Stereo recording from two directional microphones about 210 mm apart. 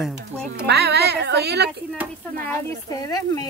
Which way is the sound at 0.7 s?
50° right (ahead or behind).